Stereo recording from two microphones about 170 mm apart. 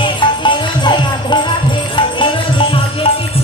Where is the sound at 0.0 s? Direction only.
30° left (ahead or behind).